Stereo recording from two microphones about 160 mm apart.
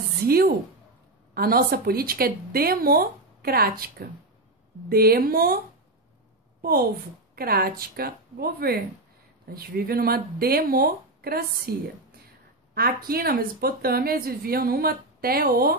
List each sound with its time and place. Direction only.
0.2 s speech: 70° right (ahead or behind)
6.6 s a woman's voice: 70° right (ahead or behind)